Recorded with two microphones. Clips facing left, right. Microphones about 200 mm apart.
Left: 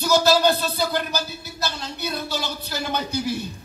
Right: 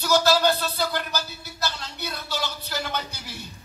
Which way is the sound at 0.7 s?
15° left (ahead or behind).